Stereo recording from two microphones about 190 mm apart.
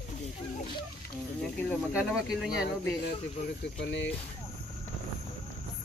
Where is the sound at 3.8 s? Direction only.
65° left (ahead or behind).